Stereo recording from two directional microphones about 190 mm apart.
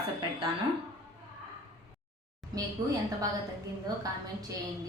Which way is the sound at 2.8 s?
20° right (ahead or behind).